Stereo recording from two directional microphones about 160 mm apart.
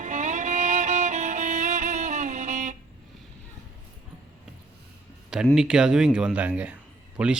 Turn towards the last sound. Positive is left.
turn(degrees=-5)  # may be behind; listen again after turning